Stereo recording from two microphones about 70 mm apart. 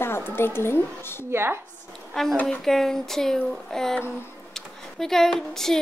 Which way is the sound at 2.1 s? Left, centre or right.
Centre.